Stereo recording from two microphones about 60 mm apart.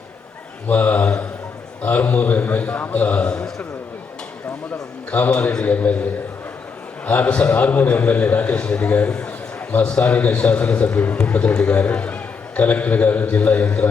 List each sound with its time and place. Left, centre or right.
0.7 s a man's voice: left
4.7 s a man's voice: left
5.3 s a man's voice: centre